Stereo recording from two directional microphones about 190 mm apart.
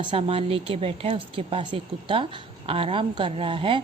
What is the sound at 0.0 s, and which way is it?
A woman's voice, 30° right (ahead or behind).